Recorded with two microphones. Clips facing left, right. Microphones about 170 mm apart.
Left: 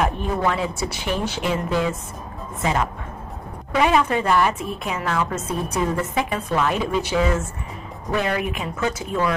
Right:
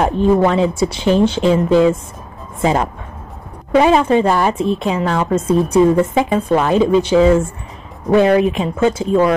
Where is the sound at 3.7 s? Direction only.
30° right (ahead or behind).